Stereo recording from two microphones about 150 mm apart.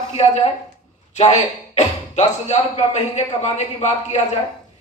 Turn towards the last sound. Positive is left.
turn(degrees=50)  # may be behind; listen again after turning